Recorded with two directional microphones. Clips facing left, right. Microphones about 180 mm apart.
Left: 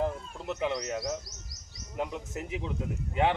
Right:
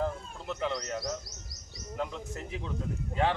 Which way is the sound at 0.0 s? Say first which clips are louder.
Left 2 dB; 15° left (ahead or behind).